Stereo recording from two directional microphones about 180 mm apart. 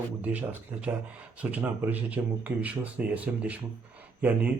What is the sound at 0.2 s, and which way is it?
Speech, 10° right (ahead or behind).